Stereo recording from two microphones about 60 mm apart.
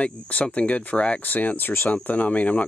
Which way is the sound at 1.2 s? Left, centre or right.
Left.